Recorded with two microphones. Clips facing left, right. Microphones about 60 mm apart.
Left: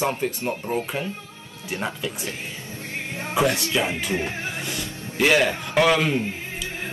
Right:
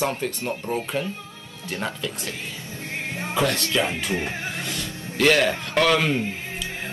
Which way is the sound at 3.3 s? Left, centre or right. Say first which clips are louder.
Left 2 dB; centre.